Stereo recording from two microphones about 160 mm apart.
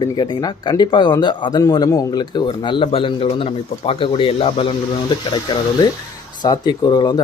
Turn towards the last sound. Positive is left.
turn(degrees=25)  # may be behind; listen again after turning